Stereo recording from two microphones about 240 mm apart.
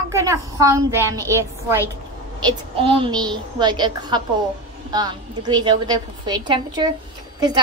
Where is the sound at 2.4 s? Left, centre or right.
Right.